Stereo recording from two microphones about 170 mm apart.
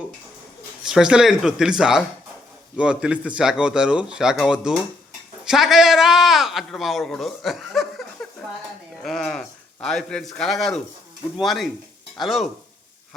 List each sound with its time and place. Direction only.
0.9 s a man's voice: 5° right (ahead or behind)
9.0 s a man's voice: 5° left (ahead or behind)